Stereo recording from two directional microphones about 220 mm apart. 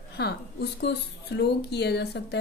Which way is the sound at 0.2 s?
50° left (ahead or behind).